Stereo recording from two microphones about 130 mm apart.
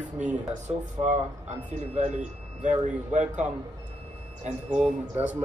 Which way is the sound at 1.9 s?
65° right (ahead or behind).